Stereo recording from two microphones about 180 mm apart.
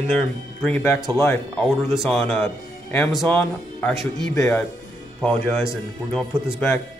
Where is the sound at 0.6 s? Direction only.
10° left (ahead or behind).